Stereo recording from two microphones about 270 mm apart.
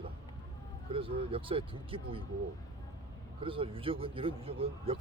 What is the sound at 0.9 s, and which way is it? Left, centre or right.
Speech, centre.